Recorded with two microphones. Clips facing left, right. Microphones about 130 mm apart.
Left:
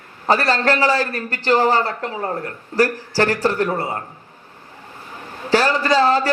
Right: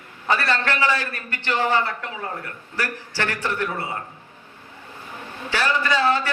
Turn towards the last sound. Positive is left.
turn(degrees=40)  # may be behind; listen again after turning